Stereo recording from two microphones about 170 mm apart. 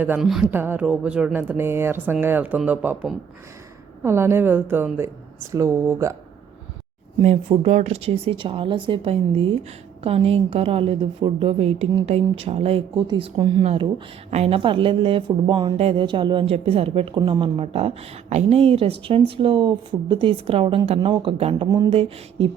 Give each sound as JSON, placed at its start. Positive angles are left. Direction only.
{"t": 0.0, "sound": "a woman's voice", "side_deg": -5}
{"t": 7.2, "sound": "speech", "side_deg": -40}